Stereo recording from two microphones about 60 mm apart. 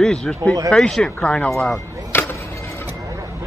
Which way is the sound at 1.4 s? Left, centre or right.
Centre.